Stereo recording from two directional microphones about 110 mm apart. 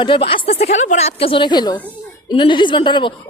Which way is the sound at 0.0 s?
55° left (ahead or behind).